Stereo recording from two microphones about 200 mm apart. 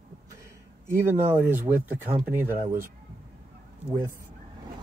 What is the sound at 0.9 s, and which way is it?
Speech, 10° right (ahead or behind).